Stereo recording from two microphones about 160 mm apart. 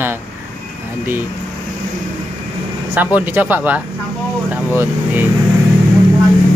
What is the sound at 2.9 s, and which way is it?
Speech, 10° right (ahead or behind).